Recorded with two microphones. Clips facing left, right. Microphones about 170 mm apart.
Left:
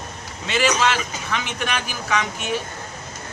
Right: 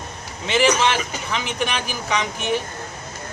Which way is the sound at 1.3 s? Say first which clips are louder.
Right 1 dB; 20° right (ahead or behind).